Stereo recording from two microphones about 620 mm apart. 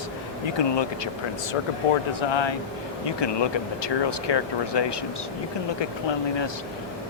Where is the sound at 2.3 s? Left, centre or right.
Left.